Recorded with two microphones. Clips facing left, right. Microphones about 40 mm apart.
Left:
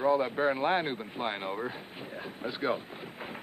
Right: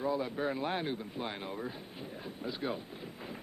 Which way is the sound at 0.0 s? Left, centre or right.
Left.